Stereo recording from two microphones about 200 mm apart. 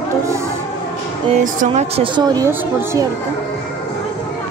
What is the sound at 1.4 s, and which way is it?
Speech, 40° right (ahead or behind).